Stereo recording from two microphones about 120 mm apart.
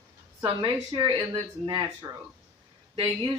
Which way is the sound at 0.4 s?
45° right (ahead or behind).